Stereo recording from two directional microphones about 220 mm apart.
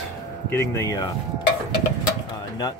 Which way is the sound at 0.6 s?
15° left (ahead or behind).